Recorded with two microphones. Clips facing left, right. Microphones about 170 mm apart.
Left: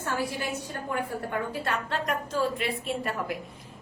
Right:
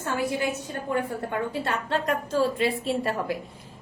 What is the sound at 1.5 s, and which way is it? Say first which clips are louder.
A woman's voice: right 3 dB; 25° right (ahead or behind).